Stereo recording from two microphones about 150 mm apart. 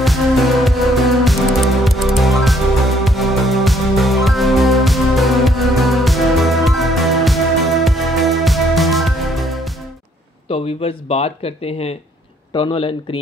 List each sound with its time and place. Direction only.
0.0 s music: centre (ahead or behind)
10.5 s speech: 40° left (ahead or behind)